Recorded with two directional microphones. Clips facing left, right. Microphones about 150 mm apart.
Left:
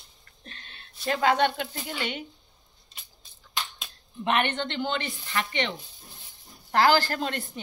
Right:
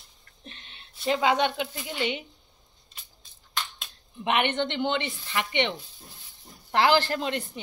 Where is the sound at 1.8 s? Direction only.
45° left (ahead or behind).